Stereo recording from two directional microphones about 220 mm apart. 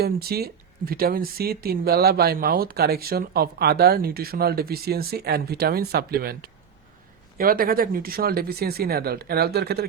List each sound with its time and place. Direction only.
0.0 s speech: 45° right (ahead or behind)